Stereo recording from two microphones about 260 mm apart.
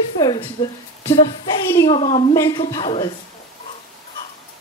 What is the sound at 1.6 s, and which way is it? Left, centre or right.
Speech, centre.